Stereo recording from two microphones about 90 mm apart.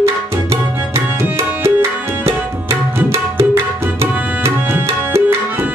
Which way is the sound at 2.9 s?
30° right (ahead or behind).